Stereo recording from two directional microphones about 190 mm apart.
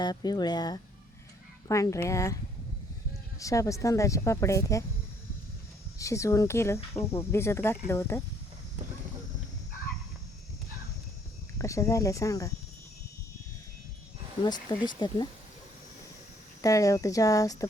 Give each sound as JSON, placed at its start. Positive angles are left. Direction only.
{"t": 0.0, "sound": "speech", "side_deg": 20}
{"t": 3.4, "sound": "speech", "side_deg": 15}
{"t": 6.0, "sound": "speech", "side_deg": 15}
{"t": 11.5, "sound": "speech", "side_deg": 15}
{"t": 14.4, "sound": "speech", "side_deg": 25}
{"t": 16.6, "sound": "speech", "side_deg": 15}